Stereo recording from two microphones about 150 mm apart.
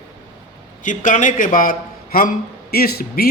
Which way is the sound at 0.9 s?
60° left (ahead or behind).